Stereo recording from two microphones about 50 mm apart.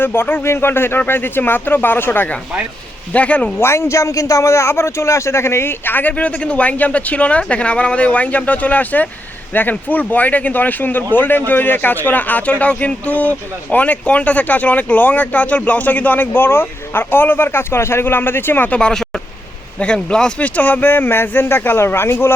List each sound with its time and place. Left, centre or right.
0.0 s speech: left
3.1 s speech: left
3.6 s speech: left
18.7 s speech: centre
20.4 s speech: left